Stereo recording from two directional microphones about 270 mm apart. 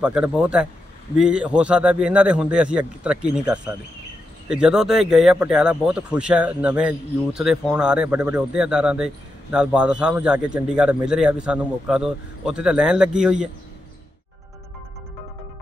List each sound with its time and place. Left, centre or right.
0.0 s speech: centre